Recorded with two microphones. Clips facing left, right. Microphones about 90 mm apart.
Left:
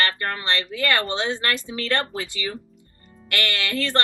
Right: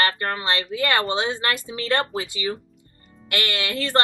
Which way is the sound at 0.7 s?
20° right (ahead or behind).